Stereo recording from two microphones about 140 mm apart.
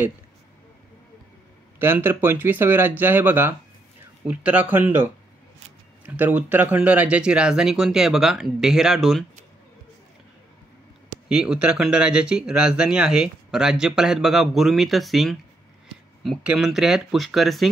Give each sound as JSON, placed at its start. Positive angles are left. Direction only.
{"t": 1.8, "sound": "speech", "side_deg": -15}
{"t": 11.2, "sound": "speech", "side_deg": -5}